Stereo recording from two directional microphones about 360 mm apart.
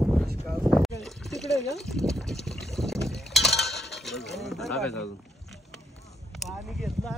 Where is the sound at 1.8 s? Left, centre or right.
Centre.